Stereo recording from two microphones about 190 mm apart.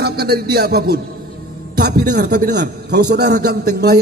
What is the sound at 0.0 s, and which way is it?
A man's voice, 55° right (ahead or behind).